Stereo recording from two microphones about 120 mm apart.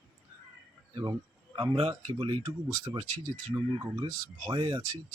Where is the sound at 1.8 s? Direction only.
55° right (ahead or behind).